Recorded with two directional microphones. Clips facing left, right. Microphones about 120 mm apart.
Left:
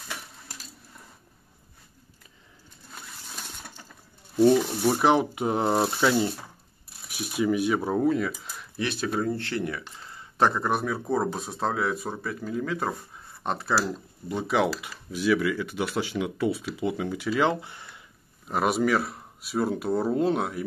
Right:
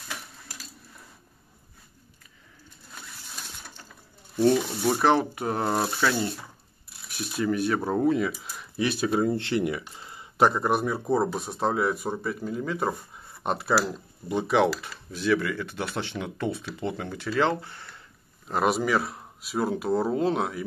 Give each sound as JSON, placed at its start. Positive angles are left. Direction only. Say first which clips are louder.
{"t": 4.8, "sound": "speech", "louder": "even", "side_deg": 15}
{"t": 7.9, "sound": "speech", "louder": "right 1 dB", "side_deg": 0}
{"t": 9.1, "sound": "speech", "louder": "right 4 dB", "side_deg": -15}
{"t": 18.5, "sound": "speech", "louder": "even", "side_deg": 0}